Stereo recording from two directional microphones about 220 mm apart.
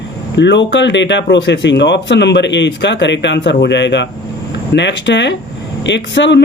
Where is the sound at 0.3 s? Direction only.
55° left (ahead or behind).